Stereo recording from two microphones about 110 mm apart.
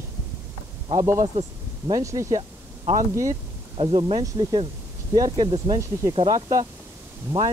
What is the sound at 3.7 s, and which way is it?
Speech, 50° right (ahead or behind).